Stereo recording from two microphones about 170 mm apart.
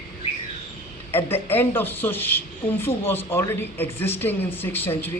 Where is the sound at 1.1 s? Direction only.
15° left (ahead or behind).